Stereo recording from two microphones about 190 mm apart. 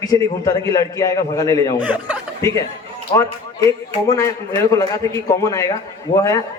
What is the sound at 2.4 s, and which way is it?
A man's voice, 15° left (ahead or behind).